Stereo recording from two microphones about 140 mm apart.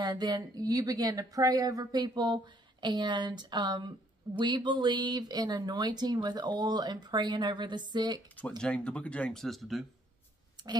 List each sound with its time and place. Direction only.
0.0 s a woman's voice: 30° right (ahead or behind)
8.4 s speech: 5° left (ahead or behind)